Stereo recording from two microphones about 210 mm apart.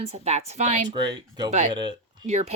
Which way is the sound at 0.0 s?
30° right (ahead or behind).